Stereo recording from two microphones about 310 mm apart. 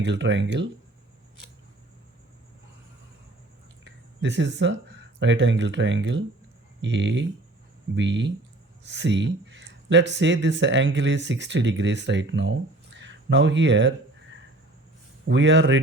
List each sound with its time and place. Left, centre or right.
0.0 s speech: right
4.2 s speech: right
15.3 s speech: right